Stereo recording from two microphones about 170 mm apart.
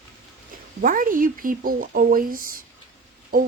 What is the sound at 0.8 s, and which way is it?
Speech, 50° right (ahead or behind).